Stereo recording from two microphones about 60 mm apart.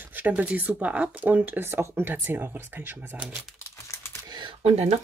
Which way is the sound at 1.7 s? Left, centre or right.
Right.